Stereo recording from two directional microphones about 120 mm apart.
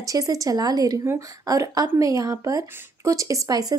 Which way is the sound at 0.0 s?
30° right (ahead or behind).